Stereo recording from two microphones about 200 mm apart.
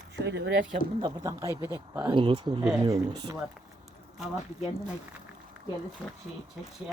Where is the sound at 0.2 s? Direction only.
60° right (ahead or behind).